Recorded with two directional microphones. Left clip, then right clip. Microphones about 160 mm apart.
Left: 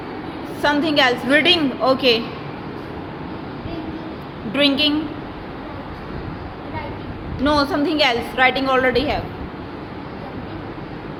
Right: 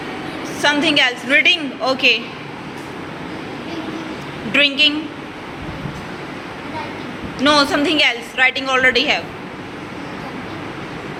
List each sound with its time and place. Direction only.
0.6 s a woman's voice: 25° left (ahead or behind)
4.5 s a woman's voice: 20° left (ahead or behind)
7.4 s a woman's voice: 25° left (ahead or behind)